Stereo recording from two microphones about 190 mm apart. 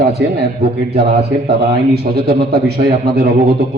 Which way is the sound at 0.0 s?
60° right (ahead or behind).